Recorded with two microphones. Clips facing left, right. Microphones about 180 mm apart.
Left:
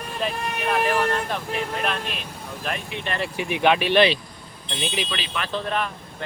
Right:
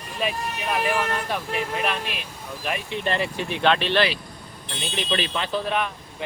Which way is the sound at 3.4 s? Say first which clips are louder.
Left 5 dB; 15° left (ahead or behind).